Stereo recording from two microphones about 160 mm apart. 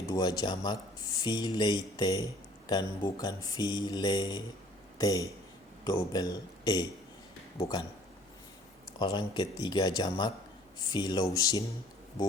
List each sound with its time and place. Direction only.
0.0 s speech: 25° left (ahead or behind)
9.0 s speech: 30° left (ahead or behind)